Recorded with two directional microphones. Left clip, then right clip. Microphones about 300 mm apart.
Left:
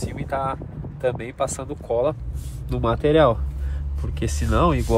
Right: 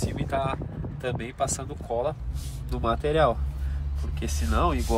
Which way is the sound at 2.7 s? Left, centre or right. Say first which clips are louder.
Left 6 dB; centre.